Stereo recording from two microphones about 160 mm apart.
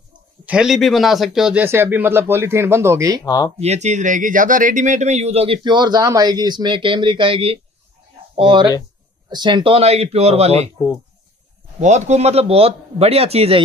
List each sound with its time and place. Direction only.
0.5 s speech: 5° right (ahead or behind)
3.3 s speech: 20° left (ahead or behind)
3.5 s speech: 45° right (ahead or behind)
11.8 s speech: 45° right (ahead or behind)